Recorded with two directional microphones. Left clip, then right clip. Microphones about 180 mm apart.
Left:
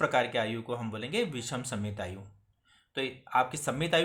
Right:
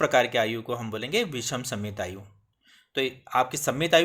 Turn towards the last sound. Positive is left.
turn(degrees=-35)  # may be behind; listen again after turning